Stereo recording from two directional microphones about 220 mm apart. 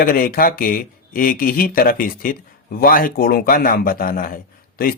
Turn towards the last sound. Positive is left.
turn(degrees=40)  # may be behind; listen again after turning